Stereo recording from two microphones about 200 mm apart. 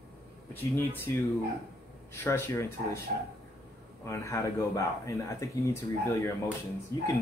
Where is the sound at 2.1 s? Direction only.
10° left (ahead or behind).